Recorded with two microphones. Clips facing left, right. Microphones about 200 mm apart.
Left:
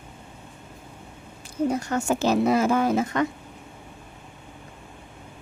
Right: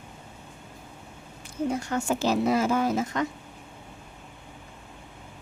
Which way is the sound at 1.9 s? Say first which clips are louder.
Left 3 dB; 45° left (ahead or behind).